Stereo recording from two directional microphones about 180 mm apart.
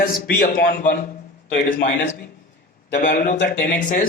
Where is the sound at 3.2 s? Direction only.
40° left (ahead or behind).